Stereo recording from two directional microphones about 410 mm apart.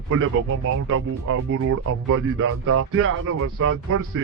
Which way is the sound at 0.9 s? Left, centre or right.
Right.